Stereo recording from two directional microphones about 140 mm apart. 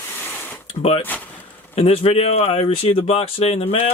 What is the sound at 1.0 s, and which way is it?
Speech, 10° left (ahead or behind).